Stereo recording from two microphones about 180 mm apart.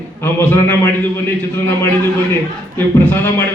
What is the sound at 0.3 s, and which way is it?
Speech, 10° left (ahead or behind).